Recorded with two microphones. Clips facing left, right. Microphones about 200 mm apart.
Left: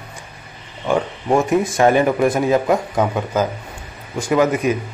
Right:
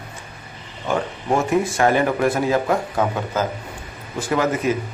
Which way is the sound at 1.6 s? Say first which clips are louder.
Left 3 dB; 20° left (ahead or behind).